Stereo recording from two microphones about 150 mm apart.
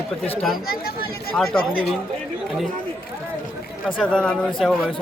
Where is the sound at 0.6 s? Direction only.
90° left.